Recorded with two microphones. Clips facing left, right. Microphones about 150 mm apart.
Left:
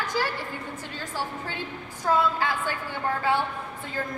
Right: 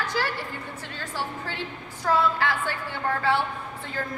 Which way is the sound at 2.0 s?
15° left (ahead or behind).